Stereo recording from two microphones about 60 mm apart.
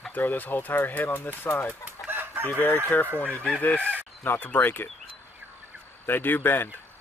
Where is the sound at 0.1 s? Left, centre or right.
Left.